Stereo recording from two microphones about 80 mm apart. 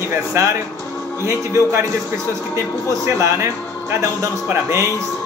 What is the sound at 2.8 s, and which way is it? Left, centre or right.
A man's voice, right.